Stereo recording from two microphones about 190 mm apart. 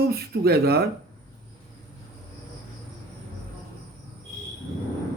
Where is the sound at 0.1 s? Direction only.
55° right (ahead or behind).